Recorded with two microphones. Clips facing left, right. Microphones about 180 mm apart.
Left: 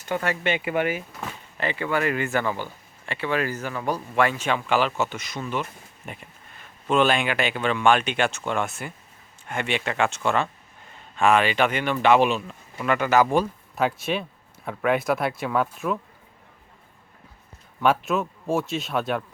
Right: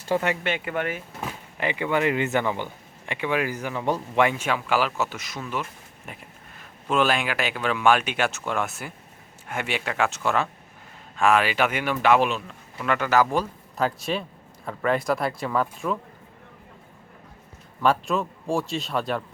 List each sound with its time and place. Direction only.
0.1 s speech: 25° right (ahead or behind)
0.4 s speech: 5° left (ahead or behind)
1.2 s speech: 15° right (ahead or behind)
4.4 s speech: 5° right (ahead or behind)
17.8 s speech: centre (ahead or behind)